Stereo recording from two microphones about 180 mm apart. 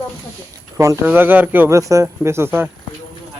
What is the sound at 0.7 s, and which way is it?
Speech, 20° right (ahead or behind).